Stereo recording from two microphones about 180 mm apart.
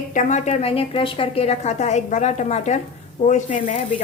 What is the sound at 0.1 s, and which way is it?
A woman's voice, 45° left (ahead or behind).